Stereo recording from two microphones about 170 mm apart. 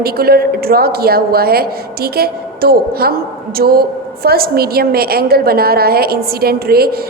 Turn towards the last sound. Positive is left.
turn(degrees=-65)  # may be behind; listen again after turning